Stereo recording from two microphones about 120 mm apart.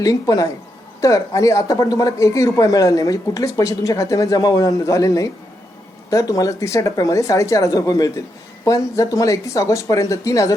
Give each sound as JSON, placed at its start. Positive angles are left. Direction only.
{"t": 0.0, "sound": "speech", "side_deg": 30}